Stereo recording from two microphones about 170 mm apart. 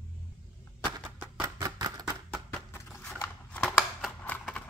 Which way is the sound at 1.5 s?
25° right (ahead or behind).